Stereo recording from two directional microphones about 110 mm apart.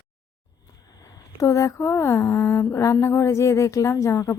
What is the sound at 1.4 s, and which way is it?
A woman's voice, 30° left (ahead or behind).